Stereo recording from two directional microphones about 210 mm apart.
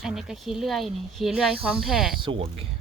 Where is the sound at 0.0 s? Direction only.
Centre (ahead or behind).